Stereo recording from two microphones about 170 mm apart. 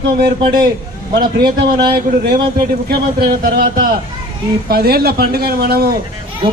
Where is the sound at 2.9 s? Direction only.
60° right (ahead or behind).